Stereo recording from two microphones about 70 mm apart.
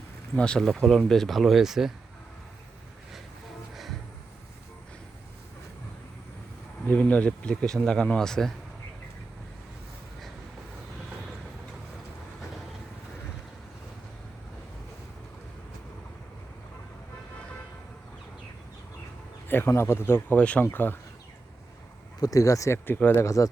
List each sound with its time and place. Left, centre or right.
0.3 s speech: centre
6.8 s speech: centre
19.5 s speech: left
20.4 s speech: centre
20.7 s speech: left
22.2 s speech: left